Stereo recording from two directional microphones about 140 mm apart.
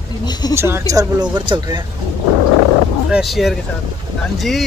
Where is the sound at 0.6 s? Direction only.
20° right (ahead or behind); by 1.8 s 35° right (ahead or behind).